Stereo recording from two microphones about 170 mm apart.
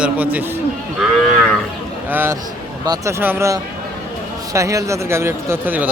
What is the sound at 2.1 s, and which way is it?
Speech, 10° right (ahead or behind).